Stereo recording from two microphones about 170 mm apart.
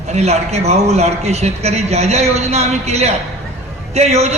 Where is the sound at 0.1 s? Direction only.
40° right (ahead or behind).